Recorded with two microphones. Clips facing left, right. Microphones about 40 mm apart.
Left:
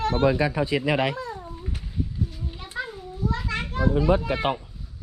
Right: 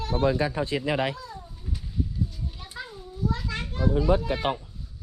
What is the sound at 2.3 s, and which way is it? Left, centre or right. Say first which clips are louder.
Cat: left 3 dB; left.